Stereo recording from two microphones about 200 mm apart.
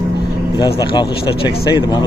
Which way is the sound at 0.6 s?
20° left (ahead or behind).